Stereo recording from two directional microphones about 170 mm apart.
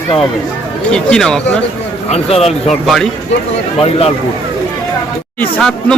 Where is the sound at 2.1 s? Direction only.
35° left (ahead or behind).